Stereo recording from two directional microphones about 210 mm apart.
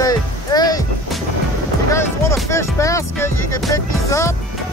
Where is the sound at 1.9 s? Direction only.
15° left (ahead or behind).